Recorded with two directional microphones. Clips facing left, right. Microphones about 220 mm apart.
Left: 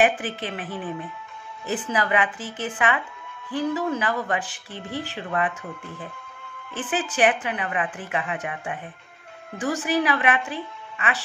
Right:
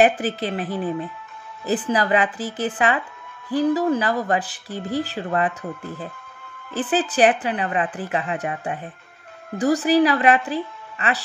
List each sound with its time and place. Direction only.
0.0 s speech: 40° right (ahead or behind)
6.7 s speech: 35° right (ahead or behind)